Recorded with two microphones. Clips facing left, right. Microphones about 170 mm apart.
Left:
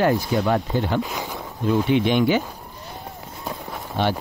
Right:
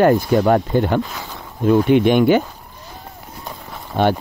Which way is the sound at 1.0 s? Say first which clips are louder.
Left 2 dB; 10° left (ahead or behind).